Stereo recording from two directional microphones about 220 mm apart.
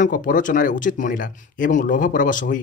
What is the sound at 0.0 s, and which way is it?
Speech, 35° left (ahead or behind).